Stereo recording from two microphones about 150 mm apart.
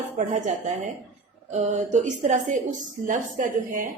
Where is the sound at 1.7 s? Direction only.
55° right (ahead or behind).